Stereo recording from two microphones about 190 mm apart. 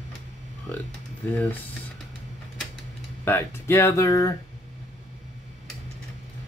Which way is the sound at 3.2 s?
10° left (ahead or behind).